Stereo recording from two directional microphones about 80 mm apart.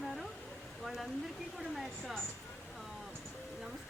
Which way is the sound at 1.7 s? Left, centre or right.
Centre.